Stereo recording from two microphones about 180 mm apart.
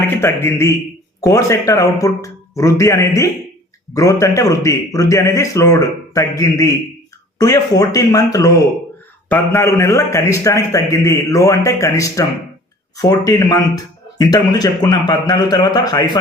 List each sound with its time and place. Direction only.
0.1 s a man's voice: 15° left (ahead or behind)